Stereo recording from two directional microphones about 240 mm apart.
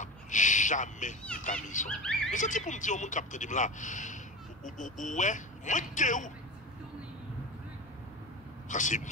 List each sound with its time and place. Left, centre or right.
0.0 s a sound: left
1.3 s speech: left
1.9 s speech: centre
2.3 s speech: left
8.6 s speech: left